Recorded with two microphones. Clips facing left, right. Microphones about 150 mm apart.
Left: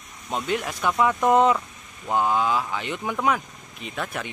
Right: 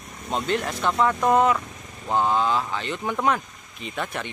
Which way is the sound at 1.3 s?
20° left (ahead or behind).